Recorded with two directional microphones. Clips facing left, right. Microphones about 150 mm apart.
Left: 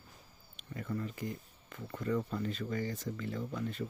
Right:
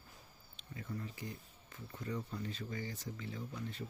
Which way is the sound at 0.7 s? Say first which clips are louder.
Left 6 dB; 65° left (ahead or behind).